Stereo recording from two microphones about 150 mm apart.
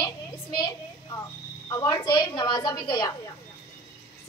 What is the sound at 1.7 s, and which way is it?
A woman's voice, 20° left (ahead or behind).